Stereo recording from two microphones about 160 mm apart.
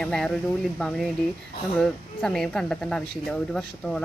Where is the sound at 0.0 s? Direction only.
5° left (ahead or behind).